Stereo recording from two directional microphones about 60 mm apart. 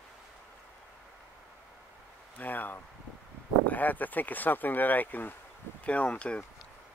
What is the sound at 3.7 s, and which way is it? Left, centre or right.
Speech, left.